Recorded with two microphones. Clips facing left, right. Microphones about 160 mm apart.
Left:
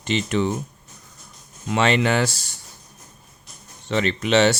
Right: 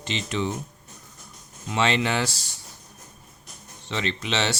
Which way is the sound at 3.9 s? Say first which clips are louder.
Left 8 dB; 50° left (ahead or behind).